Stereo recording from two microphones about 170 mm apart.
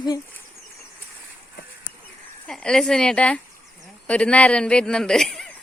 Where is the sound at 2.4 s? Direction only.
5° left (ahead or behind).